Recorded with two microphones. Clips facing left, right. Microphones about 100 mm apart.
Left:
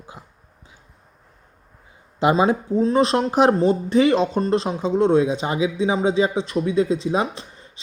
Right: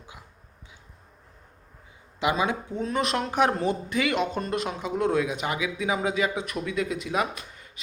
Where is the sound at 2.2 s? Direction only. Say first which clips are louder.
Left 8 dB; 35° left (ahead or behind).